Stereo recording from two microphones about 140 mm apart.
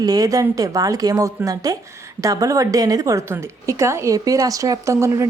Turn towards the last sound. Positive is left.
turn(degrees=-20)  # may be behind; listen again after turning